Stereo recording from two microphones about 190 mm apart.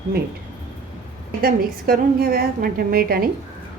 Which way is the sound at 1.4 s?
50° right (ahead or behind).